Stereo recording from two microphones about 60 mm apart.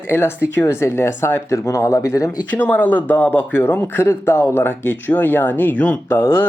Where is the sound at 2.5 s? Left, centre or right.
Left.